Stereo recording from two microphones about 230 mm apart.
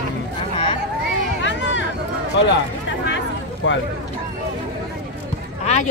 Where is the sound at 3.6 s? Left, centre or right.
Left.